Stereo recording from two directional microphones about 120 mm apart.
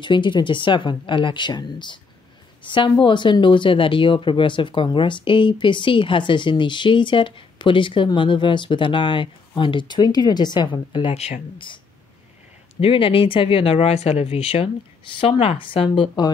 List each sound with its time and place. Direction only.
0.0 s a woman's voice: 40° left (ahead or behind)
11.1 s speech: 60° left (ahead or behind)
11.5 s speech: 45° left (ahead or behind)
12.8 s speech: 45° left (ahead or behind)